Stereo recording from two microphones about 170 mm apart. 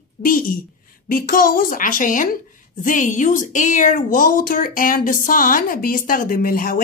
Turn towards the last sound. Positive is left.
turn(degrees=55)  # may be behind; listen again after turning